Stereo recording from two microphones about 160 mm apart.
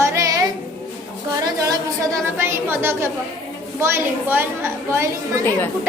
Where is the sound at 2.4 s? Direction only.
15° right (ahead or behind).